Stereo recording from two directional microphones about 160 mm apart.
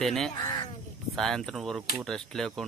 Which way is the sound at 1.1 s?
5° left (ahead or behind).